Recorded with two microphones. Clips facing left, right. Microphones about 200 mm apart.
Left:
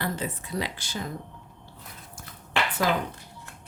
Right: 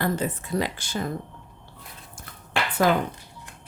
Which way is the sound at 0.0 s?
50° right (ahead or behind).